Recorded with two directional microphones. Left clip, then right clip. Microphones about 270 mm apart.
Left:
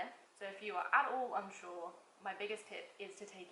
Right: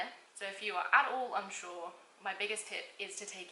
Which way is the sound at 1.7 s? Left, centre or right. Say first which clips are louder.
Right 3 dB; left.